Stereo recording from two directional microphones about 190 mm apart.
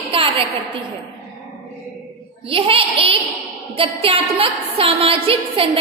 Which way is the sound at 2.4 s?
30° right (ahead or behind).